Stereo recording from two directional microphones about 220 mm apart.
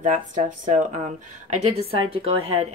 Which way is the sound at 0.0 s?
35° right (ahead or behind).